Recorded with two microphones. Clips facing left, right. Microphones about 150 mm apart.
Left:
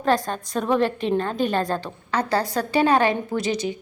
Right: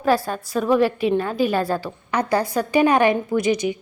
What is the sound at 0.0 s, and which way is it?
A woman's voice, 5° right (ahead or behind).